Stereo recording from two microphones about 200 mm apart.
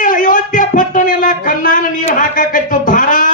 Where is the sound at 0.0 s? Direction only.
40° left (ahead or behind).